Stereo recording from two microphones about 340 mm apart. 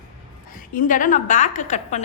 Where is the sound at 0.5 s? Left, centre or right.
Left.